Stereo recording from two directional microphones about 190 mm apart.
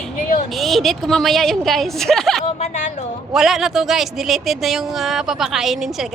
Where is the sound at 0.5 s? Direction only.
Centre (ahead or behind).